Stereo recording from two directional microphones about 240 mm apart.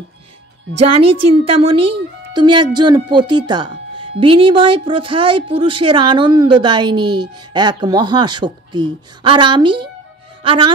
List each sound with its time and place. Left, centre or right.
0.8 s a woman's voice: right
1.4 s speech: right